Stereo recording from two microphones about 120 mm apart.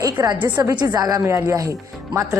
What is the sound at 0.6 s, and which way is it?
Speech, 35° right (ahead or behind).